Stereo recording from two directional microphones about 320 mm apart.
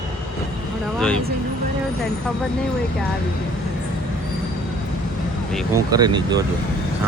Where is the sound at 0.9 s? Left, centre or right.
Centre.